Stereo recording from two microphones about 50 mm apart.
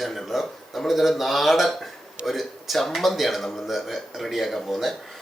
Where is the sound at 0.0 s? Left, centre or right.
Centre.